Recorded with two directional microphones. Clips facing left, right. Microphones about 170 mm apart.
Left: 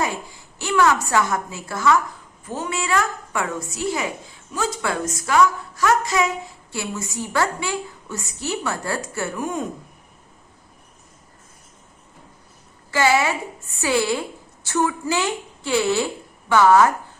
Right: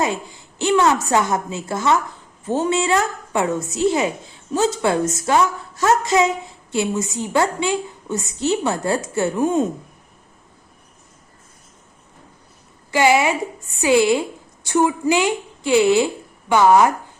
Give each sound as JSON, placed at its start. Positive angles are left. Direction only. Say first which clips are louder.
{"t": 0.0, "sound": "a woman's voice", "louder": "right 3 dB", "side_deg": -20}
{"t": 12.9, "sound": "a woman's voice", "louder": "right 3 dB", "side_deg": -15}